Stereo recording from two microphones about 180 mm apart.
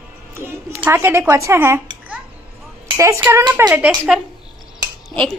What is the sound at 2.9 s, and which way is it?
Speech, 15° right (ahead or behind).